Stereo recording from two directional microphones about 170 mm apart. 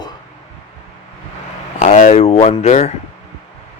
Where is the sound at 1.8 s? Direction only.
50° left (ahead or behind).